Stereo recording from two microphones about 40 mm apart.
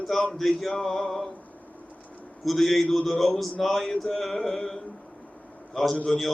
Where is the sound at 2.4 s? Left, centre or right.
Centre.